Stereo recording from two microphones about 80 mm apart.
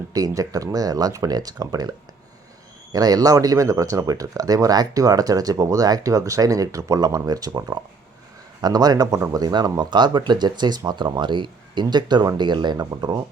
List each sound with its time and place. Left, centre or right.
0.1 s speech: right
12.7 s speech: right